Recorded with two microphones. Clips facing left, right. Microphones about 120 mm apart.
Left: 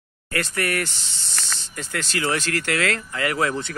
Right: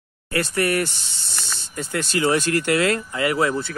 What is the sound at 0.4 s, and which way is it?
Speech, 20° right (ahead or behind).